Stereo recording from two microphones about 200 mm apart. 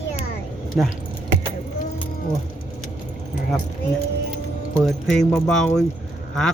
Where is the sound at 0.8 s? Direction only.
Centre (ahead or behind).